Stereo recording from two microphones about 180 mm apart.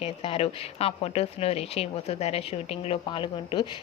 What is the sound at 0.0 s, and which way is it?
Speech, 35° left (ahead or behind).